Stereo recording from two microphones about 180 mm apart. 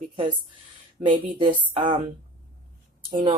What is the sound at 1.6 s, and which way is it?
Speech, 25° right (ahead or behind).